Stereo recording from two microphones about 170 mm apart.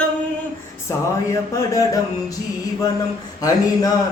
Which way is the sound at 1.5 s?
20° left (ahead or behind).